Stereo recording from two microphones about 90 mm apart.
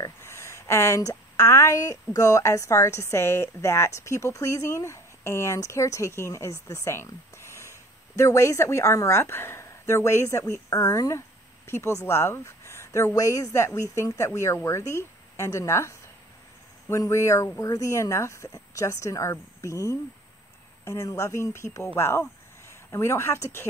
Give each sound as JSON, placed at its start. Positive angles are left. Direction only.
{"t": 0.2, "sound": "speech", "side_deg": 30}